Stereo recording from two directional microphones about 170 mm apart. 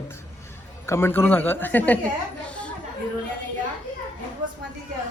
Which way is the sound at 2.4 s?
5° left (ahead or behind).